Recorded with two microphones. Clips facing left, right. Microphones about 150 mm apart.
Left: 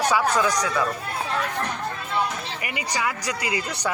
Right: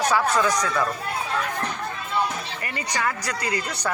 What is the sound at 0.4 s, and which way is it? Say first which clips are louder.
Speech: even; 15° left (ahead or behind).